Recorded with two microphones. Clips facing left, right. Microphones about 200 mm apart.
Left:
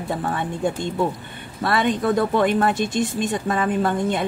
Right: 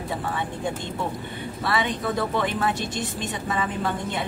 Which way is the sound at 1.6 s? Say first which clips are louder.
Left 6 dB; 50° left (ahead or behind).